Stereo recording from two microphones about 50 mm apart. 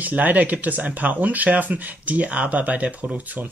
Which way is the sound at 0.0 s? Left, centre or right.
Right.